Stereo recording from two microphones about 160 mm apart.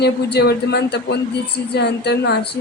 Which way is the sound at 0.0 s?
90° left.